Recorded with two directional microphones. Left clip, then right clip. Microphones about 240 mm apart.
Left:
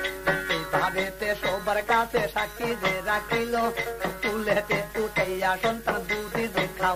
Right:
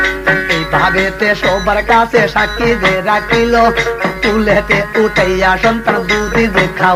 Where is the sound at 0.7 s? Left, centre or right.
Right.